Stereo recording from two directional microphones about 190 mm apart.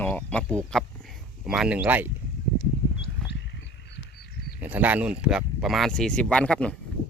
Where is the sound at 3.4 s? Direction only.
65° left (ahead or behind).